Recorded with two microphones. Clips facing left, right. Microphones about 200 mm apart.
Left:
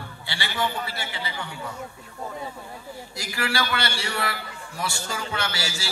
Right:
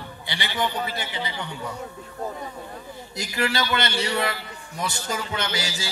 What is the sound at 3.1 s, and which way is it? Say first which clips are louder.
A man's voice: right 3 dB; 20° right (ahead or behind).